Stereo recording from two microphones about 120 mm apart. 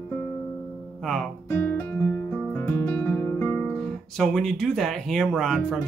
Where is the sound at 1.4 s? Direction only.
15° left (ahead or behind).